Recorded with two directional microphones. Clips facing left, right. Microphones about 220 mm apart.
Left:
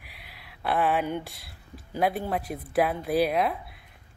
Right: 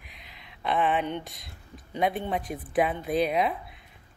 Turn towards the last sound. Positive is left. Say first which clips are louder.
# left 1 dB
turn(degrees=0)  # may be behind; listen again after turning